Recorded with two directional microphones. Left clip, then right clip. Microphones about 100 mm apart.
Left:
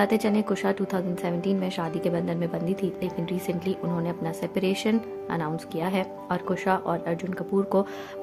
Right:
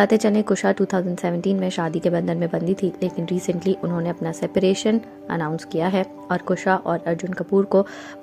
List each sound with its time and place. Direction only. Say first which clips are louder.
0.0 s a woman's voice: right 6 dB; 50° right (ahead or behind); by 7.9 s 30° right (ahead or behind)